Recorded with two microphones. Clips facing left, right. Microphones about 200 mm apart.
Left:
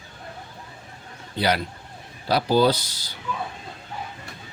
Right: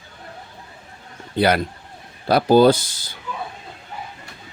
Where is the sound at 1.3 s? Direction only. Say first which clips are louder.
Right 5 dB; 55° right (ahead or behind).